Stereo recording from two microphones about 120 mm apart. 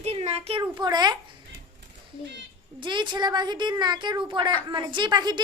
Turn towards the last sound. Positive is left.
turn(degrees=-40)  # may be behind; listen again after turning